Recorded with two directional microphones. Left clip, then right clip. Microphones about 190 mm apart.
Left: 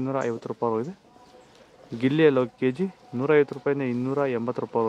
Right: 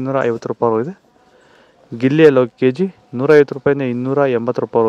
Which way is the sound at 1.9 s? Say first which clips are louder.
Right 10 dB; 40° right (ahead or behind).